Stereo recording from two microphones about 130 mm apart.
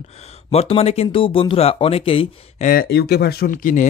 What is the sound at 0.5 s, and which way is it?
Speech, 50° left (ahead or behind).